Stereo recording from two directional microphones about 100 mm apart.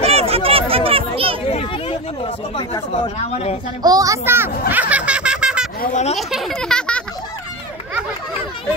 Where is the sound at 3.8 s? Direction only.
40° right (ahead or behind).